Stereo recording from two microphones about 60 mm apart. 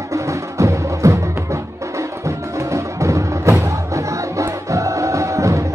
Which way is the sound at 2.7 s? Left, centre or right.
Right.